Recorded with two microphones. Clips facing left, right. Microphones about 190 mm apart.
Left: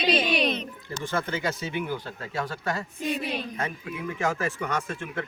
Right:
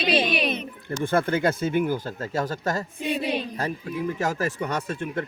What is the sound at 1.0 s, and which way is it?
Speech, 55° right (ahead or behind).